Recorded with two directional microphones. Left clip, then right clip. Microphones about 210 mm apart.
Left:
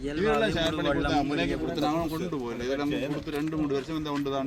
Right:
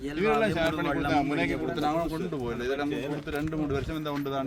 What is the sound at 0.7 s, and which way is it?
Speech, 50° right (ahead or behind).